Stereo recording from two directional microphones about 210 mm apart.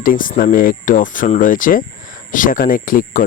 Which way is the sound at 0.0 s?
40° left (ahead or behind).